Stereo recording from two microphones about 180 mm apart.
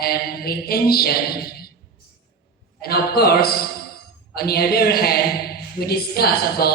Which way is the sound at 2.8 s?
60° left (ahead or behind).